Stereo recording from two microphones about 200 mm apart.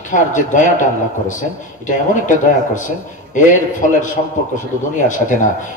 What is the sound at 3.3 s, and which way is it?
Speech, 40° left (ahead or behind).